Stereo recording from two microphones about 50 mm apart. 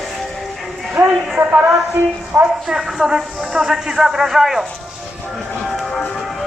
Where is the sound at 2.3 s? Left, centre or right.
Right.